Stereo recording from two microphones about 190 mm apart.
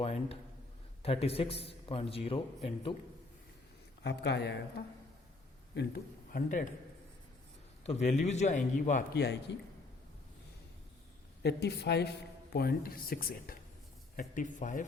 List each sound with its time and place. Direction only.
0.0 s a sound: 30° left (ahead or behind)
1.0 s a man's voice: 30° left (ahead or behind)
4.0 s speech: 65° left (ahead or behind)
5.7 s a man's voice: 50° left (ahead or behind)
7.9 s a man's voice: 35° left (ahead or behind)
9.1 s speech: 60° left (ahead or behind)
11.4 s speech: 60° left (ahead or behind); by 14.8 s 45° left (ahead or behind)